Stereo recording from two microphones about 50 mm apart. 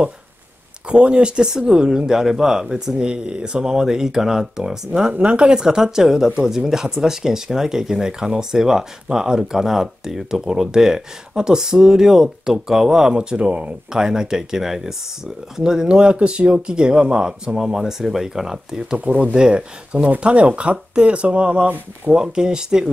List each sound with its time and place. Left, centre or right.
0.8 s speech: right
13.9 s speech: centre
18.9 s speech: right; by 22.8 s centre